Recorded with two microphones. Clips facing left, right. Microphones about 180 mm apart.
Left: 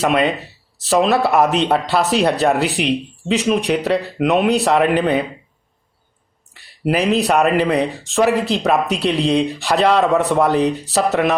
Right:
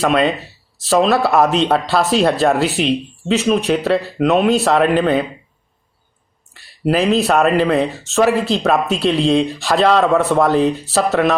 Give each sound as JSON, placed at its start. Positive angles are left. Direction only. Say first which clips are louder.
{"t": 0.0, "sound": "speech", "louder": "right 1 dB", "side_deg": 20}
{"t": 6.9, "sound": "speech", "louder": "right 1 dB", "side_deg": 15}